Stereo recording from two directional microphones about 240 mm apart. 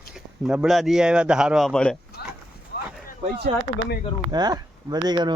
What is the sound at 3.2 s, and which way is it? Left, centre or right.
Speech, right.